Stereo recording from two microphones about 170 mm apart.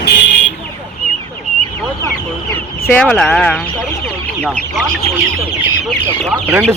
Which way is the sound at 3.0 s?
5° left (ahead or behind).